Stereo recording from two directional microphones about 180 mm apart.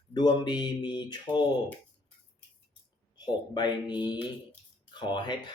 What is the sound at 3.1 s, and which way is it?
Speech, 25° left (ahead or behind).